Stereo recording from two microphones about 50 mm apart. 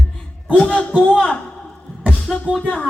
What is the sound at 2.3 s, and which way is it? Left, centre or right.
Music, left.